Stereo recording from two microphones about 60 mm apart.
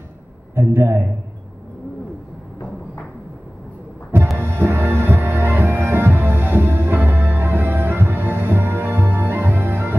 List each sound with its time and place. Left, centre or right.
0.6 s a man's voice: right
4.4 s music: right